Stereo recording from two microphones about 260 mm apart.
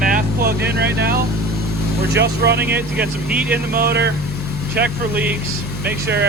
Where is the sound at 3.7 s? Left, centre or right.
Right.